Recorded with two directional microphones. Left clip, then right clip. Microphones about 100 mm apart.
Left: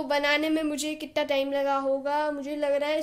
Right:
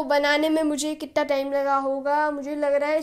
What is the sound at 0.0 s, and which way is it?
A woman's voice, 50° right (ahead or behind).